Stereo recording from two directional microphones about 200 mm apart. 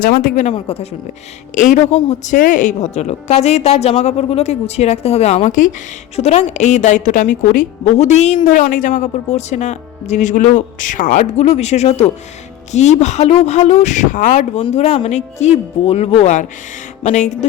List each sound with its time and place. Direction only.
0.2 s a woman's voice: 40° left (ahead or behind)
0.5 s a woman's voice: 30° left (ahead or behind)